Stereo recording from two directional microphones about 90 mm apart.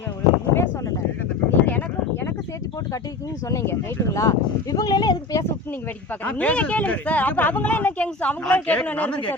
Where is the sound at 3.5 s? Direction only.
35° left (ahead or behind).